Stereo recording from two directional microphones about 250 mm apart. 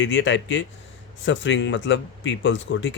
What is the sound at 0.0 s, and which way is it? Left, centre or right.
Speech, left.